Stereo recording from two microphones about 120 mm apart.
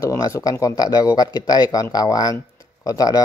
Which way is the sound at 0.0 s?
25° left (ahead or behind).